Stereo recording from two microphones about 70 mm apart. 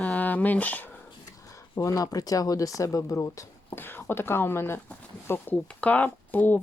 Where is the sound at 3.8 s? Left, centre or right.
Left.